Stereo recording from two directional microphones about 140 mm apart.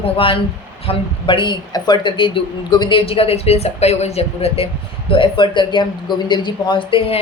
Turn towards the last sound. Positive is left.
turn(degrees=40)  # may be behind; listen again after turning